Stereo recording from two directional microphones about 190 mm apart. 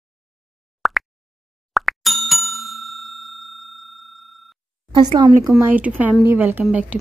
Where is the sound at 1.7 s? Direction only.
Centre (ahead or behind).